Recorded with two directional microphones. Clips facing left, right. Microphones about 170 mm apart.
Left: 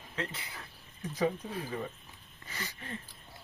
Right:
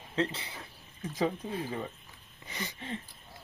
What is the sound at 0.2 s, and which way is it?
Speech, 30° right (ahead or behind).